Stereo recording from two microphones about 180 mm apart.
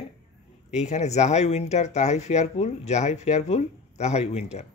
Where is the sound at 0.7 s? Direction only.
40° left (ahead or behind).